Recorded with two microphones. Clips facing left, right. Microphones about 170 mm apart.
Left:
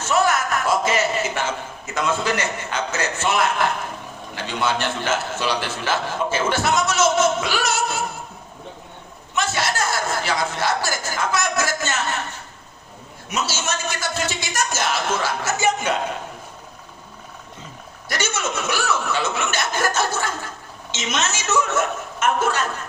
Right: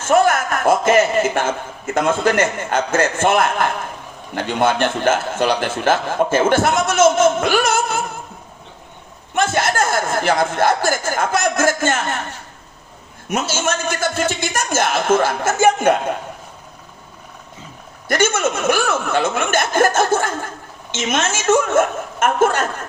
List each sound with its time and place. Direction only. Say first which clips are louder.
0.0 s a man's voice: right 5 dB; 50° right (ahead or behind)
9.3 s a man's voice: right 6 dB; 50° right (ahead or behind)
13.2 s a man's voice: right 5 dB; 50° right (ahead or behind)
18.1 s a man's voice: right 8 dB; 50° right (ahead or behind)